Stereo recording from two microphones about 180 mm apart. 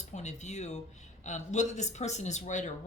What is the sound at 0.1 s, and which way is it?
Speech, 40° left (ahead or behind).